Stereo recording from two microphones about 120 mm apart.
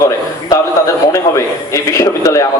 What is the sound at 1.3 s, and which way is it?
A man's voice, 25° left (ahead or behind).